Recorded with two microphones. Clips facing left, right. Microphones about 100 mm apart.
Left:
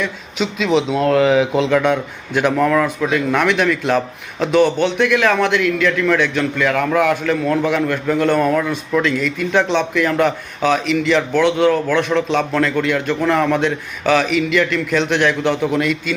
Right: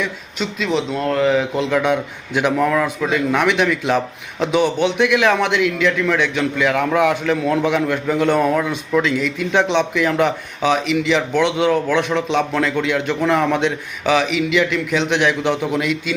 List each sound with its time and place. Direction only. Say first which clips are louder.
0.3 s speech: left 4 dB; 10° left (ahead or behind)
1.7 s a man's voice: left 2 dB; 15° right (ahead or behind)